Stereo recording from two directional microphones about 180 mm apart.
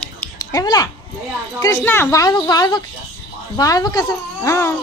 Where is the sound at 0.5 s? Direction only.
20° left (ahead or behind).